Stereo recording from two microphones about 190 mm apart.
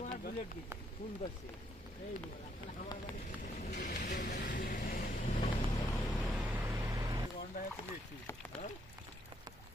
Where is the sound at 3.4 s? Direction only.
50° left (ahead or behind).